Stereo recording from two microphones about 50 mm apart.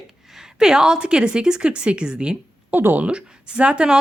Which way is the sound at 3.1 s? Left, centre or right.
Right.